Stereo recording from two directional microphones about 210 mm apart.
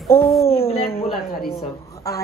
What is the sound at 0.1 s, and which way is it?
Speech, 10° left (ahead or behind).